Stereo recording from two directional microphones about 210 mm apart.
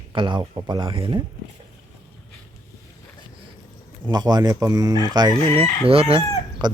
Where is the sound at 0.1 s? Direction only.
20° right (ahead or behind).